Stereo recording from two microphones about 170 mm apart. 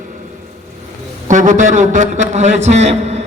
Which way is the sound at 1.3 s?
45° right (ahead or behind).